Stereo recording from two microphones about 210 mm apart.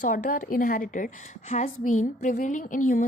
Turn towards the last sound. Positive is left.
turn(degrees=40)  # may be behind; listen again after turning